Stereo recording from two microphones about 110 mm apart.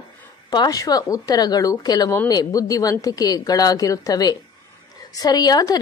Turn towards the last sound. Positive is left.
turn(degrees=35)  # may be behind; listen again after turning